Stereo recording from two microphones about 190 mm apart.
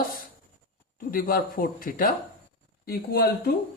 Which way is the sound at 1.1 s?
50° left (ahead or behind).